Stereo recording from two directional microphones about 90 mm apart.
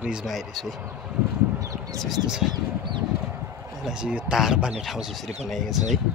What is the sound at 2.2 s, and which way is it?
Speech, 5° right (ahead or behind).